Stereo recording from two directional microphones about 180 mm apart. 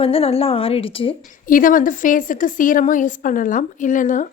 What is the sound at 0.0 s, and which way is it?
A woman's voice, 35° left (ahead or behind).